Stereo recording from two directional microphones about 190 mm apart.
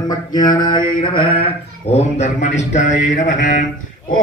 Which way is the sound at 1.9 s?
35° left (ahead or behind).